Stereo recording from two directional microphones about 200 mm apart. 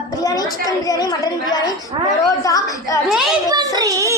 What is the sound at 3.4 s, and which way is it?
Speech, 20° right (ahead or behind).